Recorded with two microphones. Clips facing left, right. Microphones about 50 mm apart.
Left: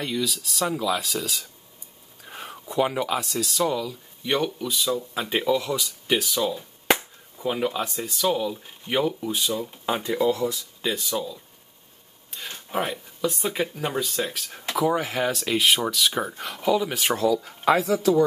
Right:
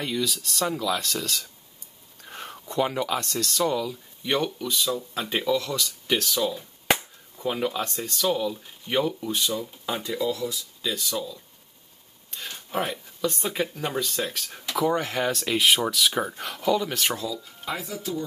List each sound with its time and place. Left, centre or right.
0.0 s speech: centre
9.8 s speech: centre
10.1 s speech: left; by 11.4 s centre
12.3 s a sound: centre
12.7 s speech: centre
17.2 s speech: left